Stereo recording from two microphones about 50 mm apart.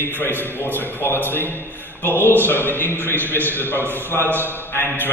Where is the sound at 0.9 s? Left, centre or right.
Left.